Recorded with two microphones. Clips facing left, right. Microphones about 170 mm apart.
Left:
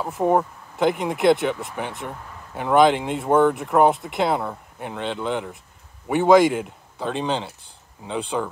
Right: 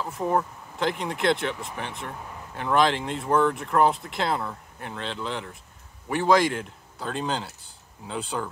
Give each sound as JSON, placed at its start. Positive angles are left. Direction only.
{"t": 0.2, "sound": "speech", "side_deg": 30}
{"t": 0.7, "sound": "speech", "side_deg": 5}